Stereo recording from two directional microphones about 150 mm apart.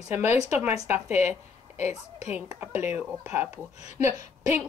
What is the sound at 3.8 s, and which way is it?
Speech, 45° left (ahead or behind).